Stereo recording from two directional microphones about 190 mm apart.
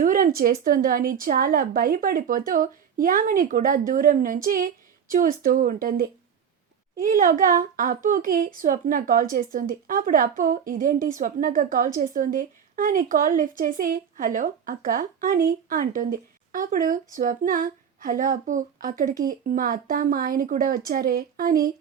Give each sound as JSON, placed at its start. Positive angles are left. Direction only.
{"t": 0.0, "sound": "speech", "side_deg": -45}